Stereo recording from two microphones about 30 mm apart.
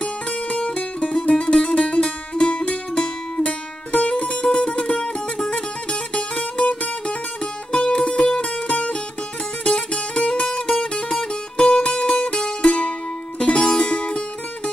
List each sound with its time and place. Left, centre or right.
0.0 s music: left
3.9 s music: left
4.5 s music: left
10.8 s music: left
12.6 s music: left
13.6 s music: left
13.8 s music: left